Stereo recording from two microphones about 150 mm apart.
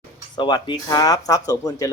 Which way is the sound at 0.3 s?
30° left (ahead or behind).